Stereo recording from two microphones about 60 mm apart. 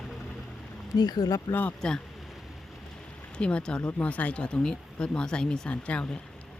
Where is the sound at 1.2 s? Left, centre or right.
Left.